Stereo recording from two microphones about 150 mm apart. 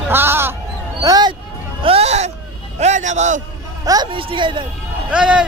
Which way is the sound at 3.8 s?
30° right (ahead or behind).